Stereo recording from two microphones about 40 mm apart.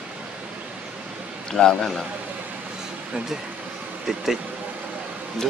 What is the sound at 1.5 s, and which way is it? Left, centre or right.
Speech, centre.